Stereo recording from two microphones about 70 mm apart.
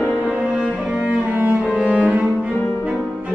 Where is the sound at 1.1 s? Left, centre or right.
Right.